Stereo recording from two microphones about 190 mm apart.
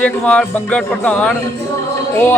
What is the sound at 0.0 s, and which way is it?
Speech, 5° left (ahead or behind).